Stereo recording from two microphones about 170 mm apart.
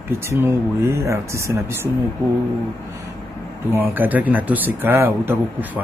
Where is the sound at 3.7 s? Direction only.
10° right (ahead or behind).